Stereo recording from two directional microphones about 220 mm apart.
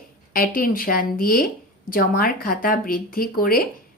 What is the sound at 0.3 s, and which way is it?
Speech, 40° left (ahead or behind).